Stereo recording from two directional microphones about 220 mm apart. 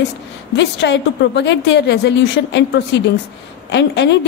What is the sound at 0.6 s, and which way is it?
Speech, 50° left (ahead or behind).